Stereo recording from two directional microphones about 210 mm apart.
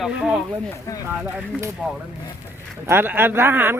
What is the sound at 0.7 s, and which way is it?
Speech, 15° left (ahead or behind).